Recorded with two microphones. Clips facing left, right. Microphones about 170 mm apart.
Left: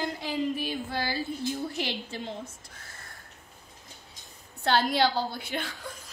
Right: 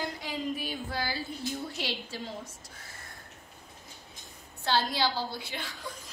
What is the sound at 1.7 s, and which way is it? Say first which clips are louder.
Speech: left 3 dB; 20° left (ahead or behind).